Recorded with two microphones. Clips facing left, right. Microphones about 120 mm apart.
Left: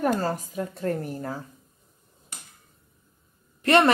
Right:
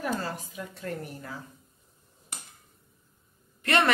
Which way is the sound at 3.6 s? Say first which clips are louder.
Left 6 dB; 35° left (ahead or behind).